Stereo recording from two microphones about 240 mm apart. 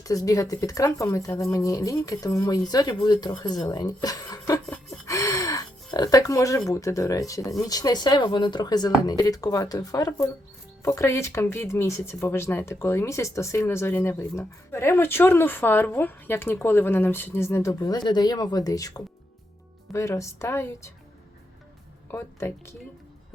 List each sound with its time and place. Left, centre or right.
0.0 s speech: centre
22.1 s speech: centre